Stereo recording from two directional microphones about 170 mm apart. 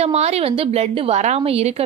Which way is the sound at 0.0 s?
40° right (ahead or behind).